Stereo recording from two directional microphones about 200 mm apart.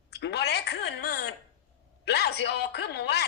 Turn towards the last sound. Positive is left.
turn(degrees=55)  # may be behind; listen again after turning